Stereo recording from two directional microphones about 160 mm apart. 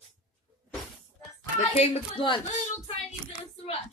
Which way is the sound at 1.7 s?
30° left (ahead or behind).